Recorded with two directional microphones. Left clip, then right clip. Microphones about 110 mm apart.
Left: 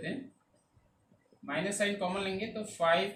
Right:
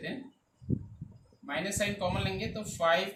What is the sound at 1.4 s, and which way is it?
Speech, 20° left (ahead or behind).